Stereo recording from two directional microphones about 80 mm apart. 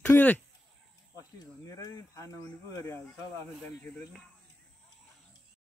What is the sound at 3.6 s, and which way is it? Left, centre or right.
Speech, centre.